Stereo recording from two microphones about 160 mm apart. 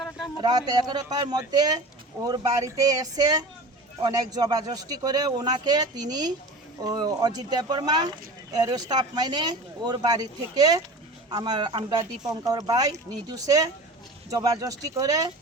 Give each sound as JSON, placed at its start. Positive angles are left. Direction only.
{"t": 0.4, "sound": "speech", "side_deg": -25}